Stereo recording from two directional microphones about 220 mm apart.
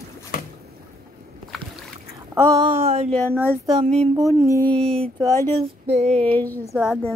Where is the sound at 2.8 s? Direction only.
30° right (ahead or behind).